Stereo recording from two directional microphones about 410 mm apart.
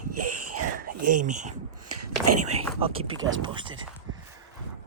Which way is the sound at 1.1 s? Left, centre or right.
Centre.